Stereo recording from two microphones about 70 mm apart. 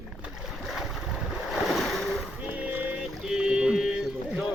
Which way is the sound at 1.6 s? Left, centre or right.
Centre.